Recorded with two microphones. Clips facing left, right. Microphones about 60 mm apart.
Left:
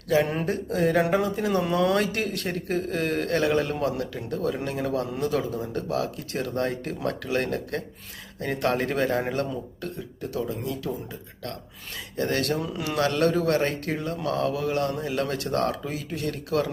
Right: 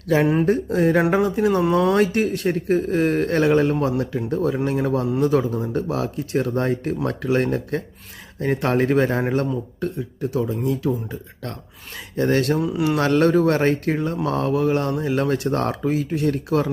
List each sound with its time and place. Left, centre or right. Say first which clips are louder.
0.1 s a man's voice: right 6 dB; right
1.4 s a man's voice: right 5 dB; centre
12.1 s a man's voice: right 6 dB; right
12.5 s speech: right 7 dB; centre
13.0 s speech: right 5 dB; right